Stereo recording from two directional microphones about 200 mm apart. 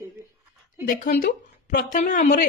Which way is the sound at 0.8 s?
40° left (ahead or behind).